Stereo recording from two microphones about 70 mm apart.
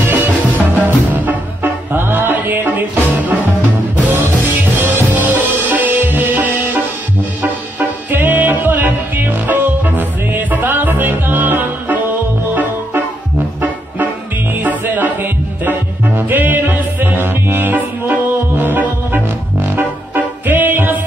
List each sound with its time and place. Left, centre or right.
0.0 s music: right
5.1 s music: right
8.1 s music: right
14.6 s music: right
20.4 s music: right